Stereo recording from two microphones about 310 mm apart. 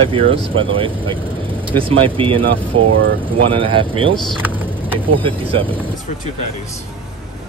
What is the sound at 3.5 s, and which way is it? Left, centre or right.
Speech, centre.